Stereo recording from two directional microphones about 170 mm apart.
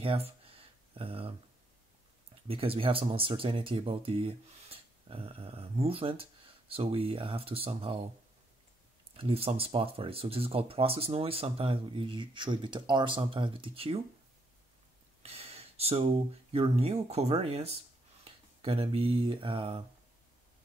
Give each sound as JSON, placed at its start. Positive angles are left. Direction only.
{"t": 0.0, "sound": "speech", "side_deg": -35}
{"t": 2.4, "sound": "speech", "side_deg": -35}
{"t": 9.1, "sound": "speech", "side_deg": -35}
{"t": 15.2, "sound": "speech", "side_deg": -35}